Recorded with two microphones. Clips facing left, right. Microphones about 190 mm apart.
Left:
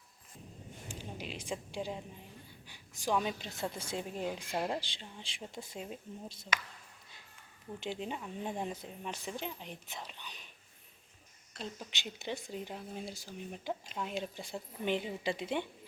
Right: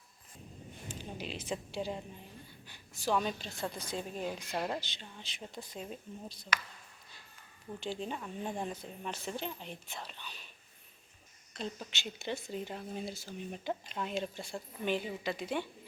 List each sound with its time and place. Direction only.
0.9 s a sound: 10° left (ahead or behind)
1.7 s a woman's voice: 15° left (ahead or behind)
4.8 s a woman's voice: 30° left (ahead or behind)
7.8 s a woman's voice: 20° left (ahead or behind)
11.5 s a woman's voice: 10° left (ahead or behind); by 15.6 s 25° left (ahead or behind)